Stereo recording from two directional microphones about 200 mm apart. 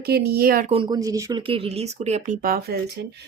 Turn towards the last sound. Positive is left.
turn(degrees=-50)  # may be behind; listen again after turning